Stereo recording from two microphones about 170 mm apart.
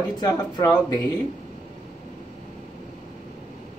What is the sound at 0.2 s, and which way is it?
Speech, 20° left (ahead or behind).